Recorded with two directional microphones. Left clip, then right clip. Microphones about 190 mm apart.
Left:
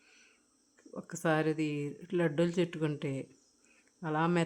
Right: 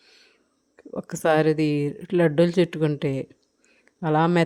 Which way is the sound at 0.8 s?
35° right (ahead or behind).